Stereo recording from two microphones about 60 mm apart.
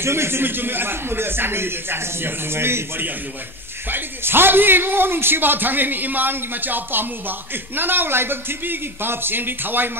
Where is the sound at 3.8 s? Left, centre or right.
Right.